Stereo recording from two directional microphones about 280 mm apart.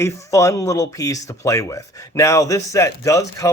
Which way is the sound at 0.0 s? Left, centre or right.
Centre.